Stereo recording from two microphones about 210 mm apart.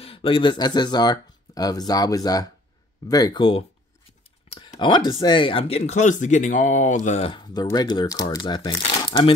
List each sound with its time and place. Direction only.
0.0 s speech: 25° left (ahead or behind)